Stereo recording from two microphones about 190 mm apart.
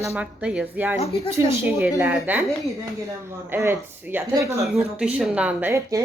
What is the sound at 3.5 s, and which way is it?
Speech, 10° right (ahead or behind).